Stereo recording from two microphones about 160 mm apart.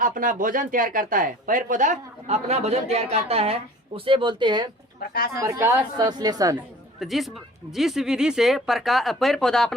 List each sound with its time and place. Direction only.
0.0 s speech: 55° right (ahead or behind); by 4.7 s 30° right (ahead or behind)
5.3 s a woman's voice: 20° right (ahead or behind)
7.0 s speech: centre (ahead or behind)